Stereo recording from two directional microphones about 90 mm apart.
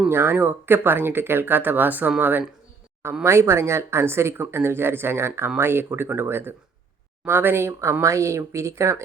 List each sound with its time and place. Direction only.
0.1 s speech: 25° right (ahead or behind)
3.2 s speech: 30° right (ahead or behind)